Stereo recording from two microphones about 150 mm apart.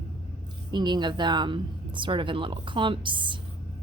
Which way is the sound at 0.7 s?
30° right (ahead or behind).